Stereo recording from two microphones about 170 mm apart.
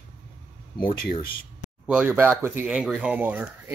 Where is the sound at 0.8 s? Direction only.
55° left (ahead or behind).